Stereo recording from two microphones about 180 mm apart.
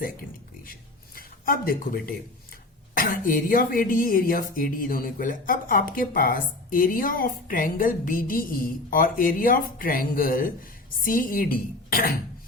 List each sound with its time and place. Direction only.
0.6 s speech: 55° left (ahead or behind)